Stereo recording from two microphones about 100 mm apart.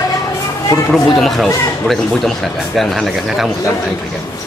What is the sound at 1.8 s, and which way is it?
Speech, centre (ahead or behind).